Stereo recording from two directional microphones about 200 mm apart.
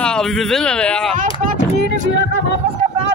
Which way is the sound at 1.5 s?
55° right (ahead or behind).